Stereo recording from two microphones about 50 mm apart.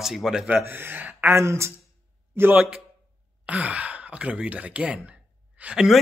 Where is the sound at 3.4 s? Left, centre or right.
Right.